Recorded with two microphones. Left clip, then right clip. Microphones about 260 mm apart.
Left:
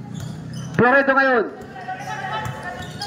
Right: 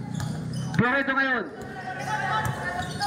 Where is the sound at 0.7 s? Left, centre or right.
Centre.